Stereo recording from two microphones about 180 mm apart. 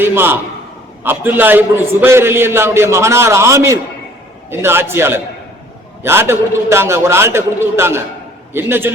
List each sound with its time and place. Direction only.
0.0 s a man's voice: 10° right (ahead or behind)